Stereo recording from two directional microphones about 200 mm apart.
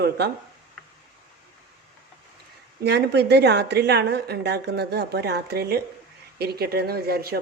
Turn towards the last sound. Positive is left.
turn(degrees=-50)  # may be behind; listen again after turning